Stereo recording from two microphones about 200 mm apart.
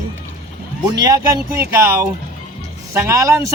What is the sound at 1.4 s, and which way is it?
Speech, 10° right (ahead or behind).